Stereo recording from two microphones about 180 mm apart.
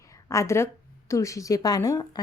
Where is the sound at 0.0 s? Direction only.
15° left (ahead or behind).